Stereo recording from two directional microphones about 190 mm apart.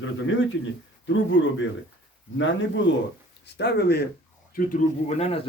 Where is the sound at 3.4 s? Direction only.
60° left (ahead or behind).